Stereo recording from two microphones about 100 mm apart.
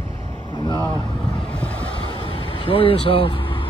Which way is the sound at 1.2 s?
10° left (ahead or behind).